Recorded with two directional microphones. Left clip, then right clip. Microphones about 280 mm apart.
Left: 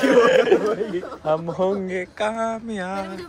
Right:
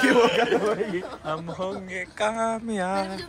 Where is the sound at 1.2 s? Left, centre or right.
Left.